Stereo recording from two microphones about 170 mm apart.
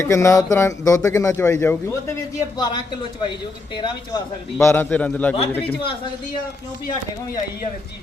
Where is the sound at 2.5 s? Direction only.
25° left (ahead or behind); by 5.3 s 10° left (ahead or behind).